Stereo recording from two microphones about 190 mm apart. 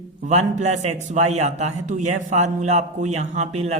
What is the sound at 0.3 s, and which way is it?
Speech, 35° right (ahead or behind).